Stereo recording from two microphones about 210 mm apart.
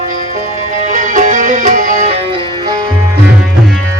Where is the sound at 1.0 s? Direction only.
35° right (ahead or behind).